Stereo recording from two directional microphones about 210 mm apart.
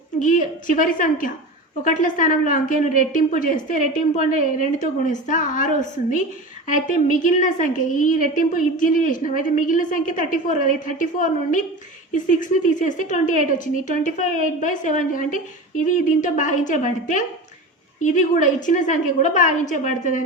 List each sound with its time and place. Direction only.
0.2 s a woman's voice: 40° left (ahead or behind)